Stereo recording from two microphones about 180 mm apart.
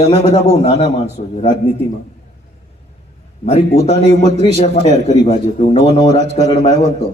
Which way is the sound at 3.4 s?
35° left (ahead or behind).